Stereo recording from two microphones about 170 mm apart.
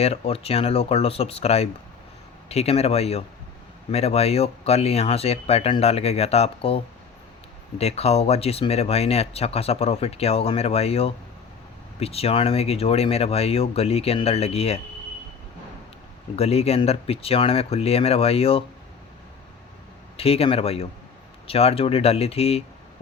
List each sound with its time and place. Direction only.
0.0 s speech: 35° left (ahead or behind)
16.3 s speech: 35° left (ahead or behind)
20.1 s speech: 35° left (ahead or behind)